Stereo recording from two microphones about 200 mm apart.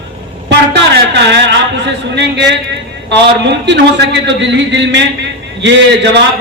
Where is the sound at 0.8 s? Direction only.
60° right (ahead or behind).